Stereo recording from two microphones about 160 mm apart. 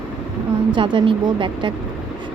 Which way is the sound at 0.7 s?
30° right (ahead or behind).